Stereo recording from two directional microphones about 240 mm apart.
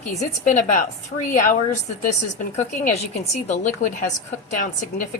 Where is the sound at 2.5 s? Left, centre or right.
Left.